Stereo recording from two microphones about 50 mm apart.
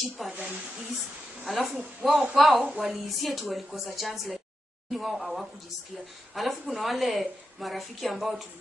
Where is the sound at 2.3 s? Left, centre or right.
Centre.